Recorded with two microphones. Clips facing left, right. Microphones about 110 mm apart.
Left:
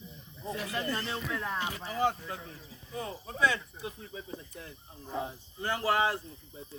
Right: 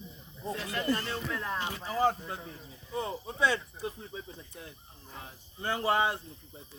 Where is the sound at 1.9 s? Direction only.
35° right (ahead or behind).